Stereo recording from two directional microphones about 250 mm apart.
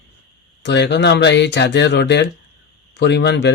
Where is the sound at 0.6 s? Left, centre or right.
Left.